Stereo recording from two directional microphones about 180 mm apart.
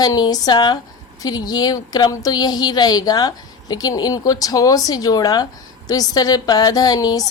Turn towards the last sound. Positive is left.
turn(degrees=20)  # may be behind; listen again after turning